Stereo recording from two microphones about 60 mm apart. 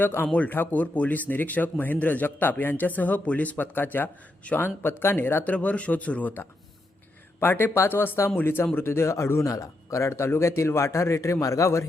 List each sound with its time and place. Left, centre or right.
0.0 s a man's voice: left
5.5 s a man's voice: left
11.3 s a man's voice: left